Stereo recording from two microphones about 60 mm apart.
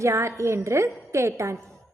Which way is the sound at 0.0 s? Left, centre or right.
Right.